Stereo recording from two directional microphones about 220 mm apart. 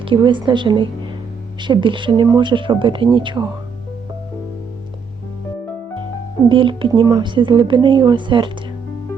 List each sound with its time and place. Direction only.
0.0 s speech: 20° right (ahead or behind)
6.5 s speech: 25° right (ahead or behind)